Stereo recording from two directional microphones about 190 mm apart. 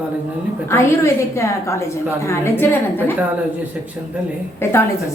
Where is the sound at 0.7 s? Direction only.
15° left (ahead or behind).